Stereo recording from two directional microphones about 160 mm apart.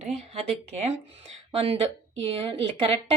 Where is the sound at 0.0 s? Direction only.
45° right (ahead or behind).